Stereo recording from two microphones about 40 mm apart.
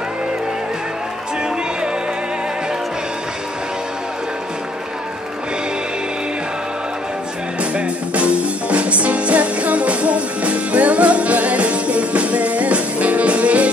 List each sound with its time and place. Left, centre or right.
7.7 s music: right